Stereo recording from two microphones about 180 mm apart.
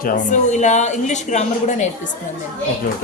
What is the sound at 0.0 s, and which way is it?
A woman's voice, 45° left (ahead or behind).